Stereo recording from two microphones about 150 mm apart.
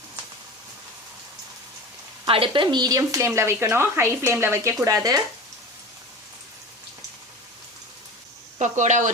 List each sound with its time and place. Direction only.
2.2 s speech: 40° right (ahead or behind); by 4.9 s 20° right (ahead or behind)
8.5 s speech: 55° right (ahead or behind)